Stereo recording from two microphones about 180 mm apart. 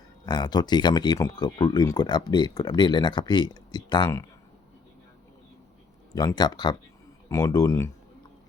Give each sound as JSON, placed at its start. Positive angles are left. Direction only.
{"t": 0.3, "sound": "speech", "side_deg": 25}
{"t": 6.1, "sound": "speech", "side_deg": 20}